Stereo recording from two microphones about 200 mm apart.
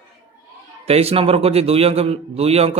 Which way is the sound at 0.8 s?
30° right (ahead or behind).